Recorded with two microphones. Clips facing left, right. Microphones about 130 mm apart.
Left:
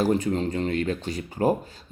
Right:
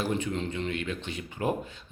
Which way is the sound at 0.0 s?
40° left (ahead or behind).